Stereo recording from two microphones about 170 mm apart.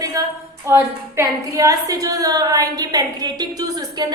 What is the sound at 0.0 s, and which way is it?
A woman's voice, 20° right (ahead or behind).